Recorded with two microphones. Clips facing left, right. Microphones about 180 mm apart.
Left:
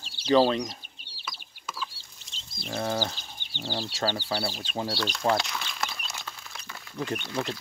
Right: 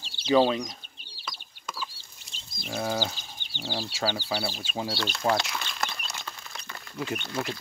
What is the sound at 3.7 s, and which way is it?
Speech, 5° right (ahead or behind).